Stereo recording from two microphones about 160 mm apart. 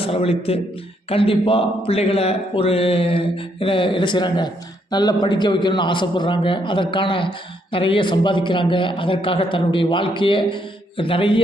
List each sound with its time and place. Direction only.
0.0 s a man's voice: 35° left (ahead or behind)